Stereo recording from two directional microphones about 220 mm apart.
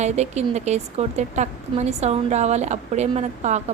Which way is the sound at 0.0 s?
30° right (ahead or behind).